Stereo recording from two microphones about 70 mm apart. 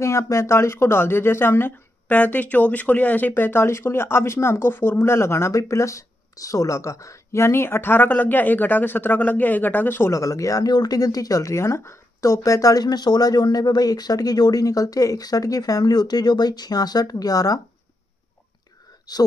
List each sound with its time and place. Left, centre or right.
0.0 s speech: left
10.1 s speech: left
19.1 s speech: left